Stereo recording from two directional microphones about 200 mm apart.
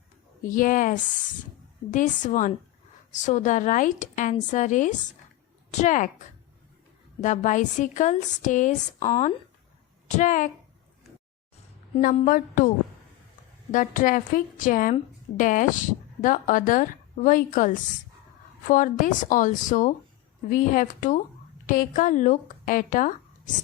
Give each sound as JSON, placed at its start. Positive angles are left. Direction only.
{"t": 0.4, "sound": "speech", "side_deg": 40}
{"t": 9.0, "sound": "speech", "side_deg": 30}
{"t": 10.1, "sound": "speech", "side_deg": 40}
{"t": 11.9, "sound": "speech", "side_deg": 40}